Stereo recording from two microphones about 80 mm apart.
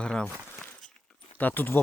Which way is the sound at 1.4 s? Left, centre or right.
Left.